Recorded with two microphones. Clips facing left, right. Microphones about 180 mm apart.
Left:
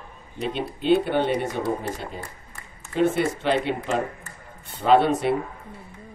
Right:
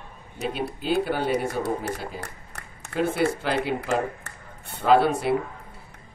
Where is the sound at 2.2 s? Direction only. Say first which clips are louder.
Right 1 dB; 75° right (ahead or behind).